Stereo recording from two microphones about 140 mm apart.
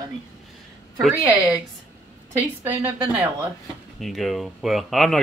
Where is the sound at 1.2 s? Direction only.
10° right (ahead or behind).